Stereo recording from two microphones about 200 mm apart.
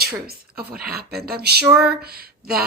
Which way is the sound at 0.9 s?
50° right (ahead or behind).